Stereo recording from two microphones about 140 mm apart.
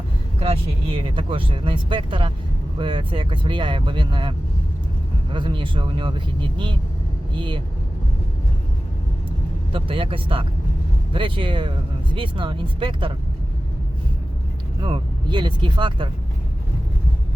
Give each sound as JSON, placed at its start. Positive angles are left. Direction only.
{"t": 0.3, "sound": "speech", "side_deg": -45}
{"t": 9.7, "sound": "speech", "side_deg": -40}
{"t": 14.8, "sound": "speech", "side_deg": -35}